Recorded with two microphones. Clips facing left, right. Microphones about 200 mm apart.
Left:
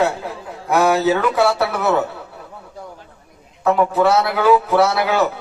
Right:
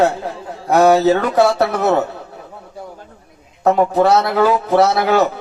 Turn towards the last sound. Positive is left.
turn(degrees=-40)  # may be behind; listen again after turning